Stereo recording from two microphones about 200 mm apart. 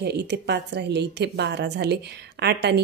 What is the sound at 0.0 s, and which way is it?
Speech, 55° right (ahead or behind).